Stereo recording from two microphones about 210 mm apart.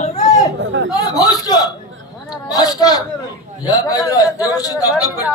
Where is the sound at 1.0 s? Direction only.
20° left (ahead or behind).